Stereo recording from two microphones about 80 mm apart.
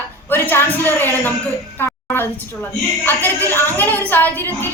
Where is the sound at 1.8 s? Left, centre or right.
Left.